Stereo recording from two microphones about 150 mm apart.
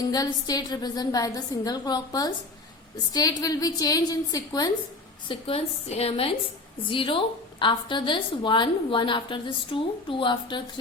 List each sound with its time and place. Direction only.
0.0 s a woman's voice: 25° left (ahead or behind)
5.3 s a woman's voice: 40° left (ahead or behind)